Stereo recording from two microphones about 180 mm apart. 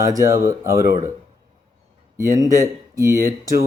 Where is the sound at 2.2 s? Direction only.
20° right (ahead or behind).